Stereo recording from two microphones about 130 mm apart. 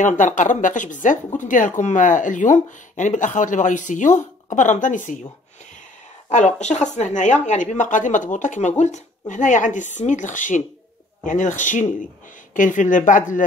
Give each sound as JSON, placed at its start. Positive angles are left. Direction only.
{"t": 0.0, "sound": "a woman's voice", "side_deg": 75}
{"t": 6.3, "sound": "a woman's voice", "side_deg": 65}